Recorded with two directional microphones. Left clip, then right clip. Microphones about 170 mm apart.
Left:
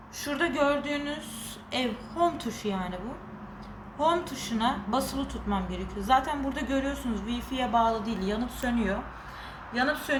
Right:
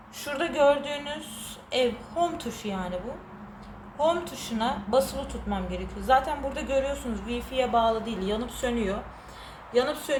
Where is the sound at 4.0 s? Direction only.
20° right (ahead or behind).